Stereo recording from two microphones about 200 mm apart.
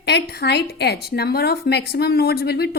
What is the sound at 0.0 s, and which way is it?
A woman's voice, 55° left (ahead or behind).